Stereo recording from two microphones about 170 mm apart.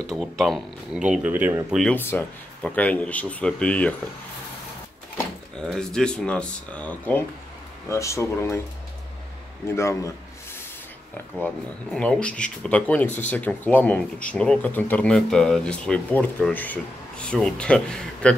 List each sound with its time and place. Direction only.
0.1 s speech: centre (ahead or behind)
1.8 s speech: 10° left (ahead or behind)
5.6 s speech: 5° left (ahead or behind)
9.7 s speech: 15° left (ahead or behind)
11.3 s speech: 5° left (ahead or behind)